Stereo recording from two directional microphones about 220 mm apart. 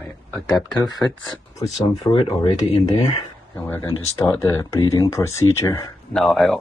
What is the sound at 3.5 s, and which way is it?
Speech, 10° left (ahead or behind).